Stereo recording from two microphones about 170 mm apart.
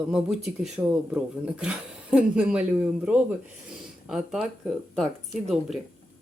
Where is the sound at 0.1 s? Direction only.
5° right (ahead or behind).